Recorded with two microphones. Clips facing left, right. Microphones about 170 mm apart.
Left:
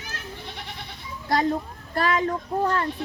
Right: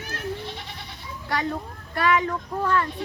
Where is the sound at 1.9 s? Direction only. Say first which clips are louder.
Right 1 dB; 35° left (ahead or behind).